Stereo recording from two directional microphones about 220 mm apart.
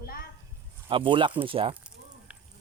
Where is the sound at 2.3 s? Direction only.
5° right (ahead or behind).